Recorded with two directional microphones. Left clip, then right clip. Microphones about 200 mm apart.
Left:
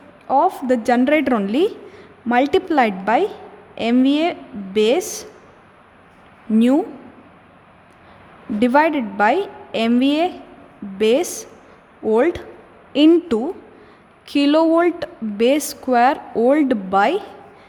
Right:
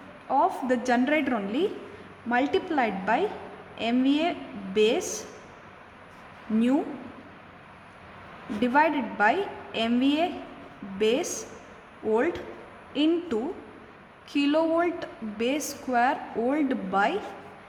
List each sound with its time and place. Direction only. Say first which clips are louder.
0.3 s a woman's voice: left 8 dB; 40° left (ahead or behind)
8.6 s a woman's voice: left 7 dB; 45° left (ahead or behind)